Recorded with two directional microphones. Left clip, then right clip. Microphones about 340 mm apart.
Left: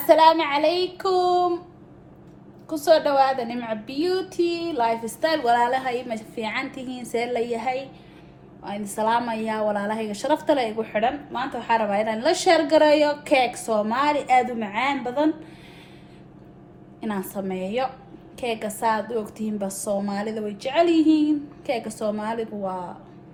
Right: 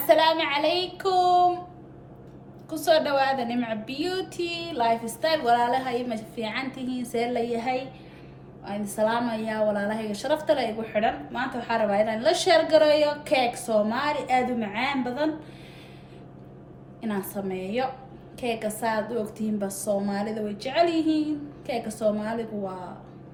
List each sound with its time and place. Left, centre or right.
0.0 s a woman's voice: centre
2.6 s a woman's voice: centre
17.0 s a woman's voice: centre